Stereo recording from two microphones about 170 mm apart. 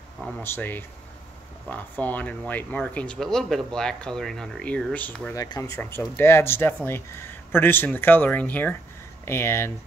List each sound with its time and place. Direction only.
0.4 s speech: 10° left (ahead or behind)
5.3 s speech: 20° left (ahead or behind)